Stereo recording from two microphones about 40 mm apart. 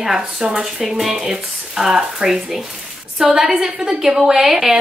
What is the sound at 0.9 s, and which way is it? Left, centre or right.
A woman's voice, centre.